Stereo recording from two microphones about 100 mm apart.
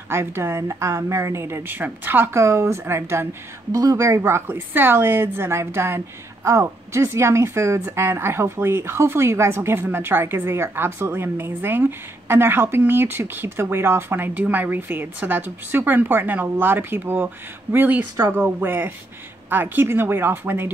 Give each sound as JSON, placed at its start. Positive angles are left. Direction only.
{"t": 0.1, "sound": "a woman's voice", "side_deg": -25}